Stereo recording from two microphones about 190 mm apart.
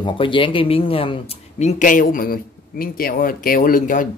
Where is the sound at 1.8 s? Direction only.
45° left (ahead or behind).